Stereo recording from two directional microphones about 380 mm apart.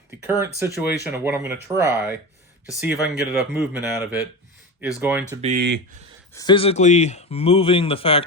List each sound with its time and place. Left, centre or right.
0.6 s speech: centre
5.4 s speech: right
6.3 s speech: centre